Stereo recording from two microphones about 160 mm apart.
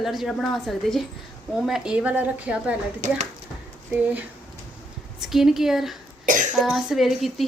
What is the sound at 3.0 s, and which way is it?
Speech, 55° right (ahead or behind).